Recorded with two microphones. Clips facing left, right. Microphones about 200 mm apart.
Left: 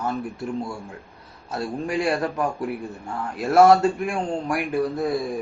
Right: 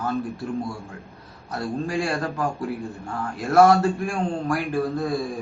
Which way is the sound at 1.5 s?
20° left (ahead or behind).